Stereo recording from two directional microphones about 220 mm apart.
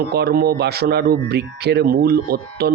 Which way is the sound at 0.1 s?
45° right (ahead or behind).